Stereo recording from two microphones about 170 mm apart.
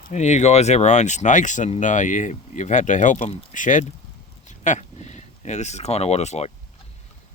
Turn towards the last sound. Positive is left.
turn(degrees=40)  # may be behind; listen again after turning